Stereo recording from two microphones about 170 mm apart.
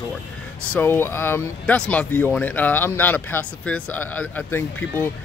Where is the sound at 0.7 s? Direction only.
10° left (ahead or behind).